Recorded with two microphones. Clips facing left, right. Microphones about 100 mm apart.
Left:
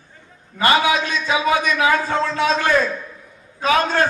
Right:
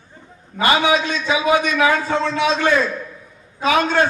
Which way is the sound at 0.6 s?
45° left (ahead or behind).